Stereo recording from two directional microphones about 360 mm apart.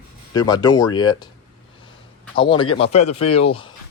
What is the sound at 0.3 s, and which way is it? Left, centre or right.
Speech, centre.